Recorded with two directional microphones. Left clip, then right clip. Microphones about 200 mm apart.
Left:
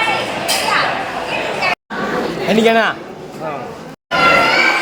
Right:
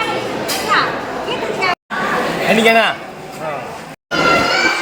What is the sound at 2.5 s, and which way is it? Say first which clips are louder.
Speech: right 1 dB; 5° left (ahead or behind).